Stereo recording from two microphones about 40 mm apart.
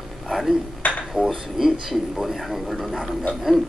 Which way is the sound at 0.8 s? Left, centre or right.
Left.